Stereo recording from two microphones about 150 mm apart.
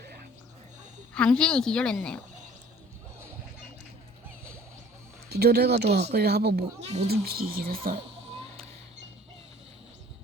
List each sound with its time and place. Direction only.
1.1 s a woman's voice: 5° left (ahead or behind)
5.3 s speech: 90° right
6.8 s speech: 45° right (ahead or behind)
7.1 s speech: 85° right